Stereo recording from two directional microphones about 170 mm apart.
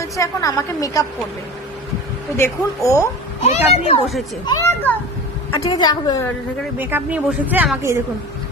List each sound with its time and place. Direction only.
0.2 s a woman's voice: 20° left (ahead or behind)
2.4 s speech: 15° left (ahead or behind)
3.4 s a child's voice: 35° left (ahead or behind)
4.4 s a woman's voice: 20° left (ahead or behind)
6.7 s speech: 10° right (ahead or behind)